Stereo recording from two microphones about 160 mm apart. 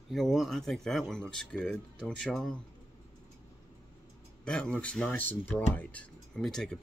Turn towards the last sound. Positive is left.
turn(degrees=5)  # may be behind; listen again after turning